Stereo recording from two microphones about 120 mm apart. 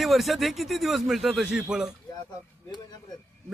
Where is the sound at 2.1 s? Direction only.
35° left (ahead or behind).